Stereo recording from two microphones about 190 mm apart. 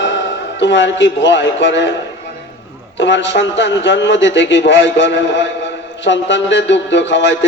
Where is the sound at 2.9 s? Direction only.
70° left (ahead or behind).